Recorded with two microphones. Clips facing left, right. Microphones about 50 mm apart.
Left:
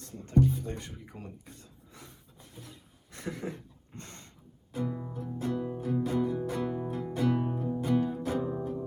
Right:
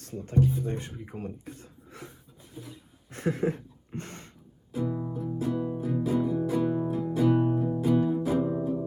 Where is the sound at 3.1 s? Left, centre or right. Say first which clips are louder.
Right 9 dB; right.